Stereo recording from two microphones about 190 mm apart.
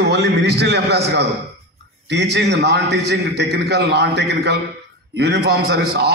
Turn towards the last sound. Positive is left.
turn(degrees=-60)  # may be behind; listen again after turning